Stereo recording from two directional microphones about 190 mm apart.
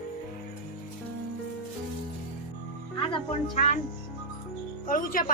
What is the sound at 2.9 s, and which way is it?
Speech, 30° left (ahead or behind).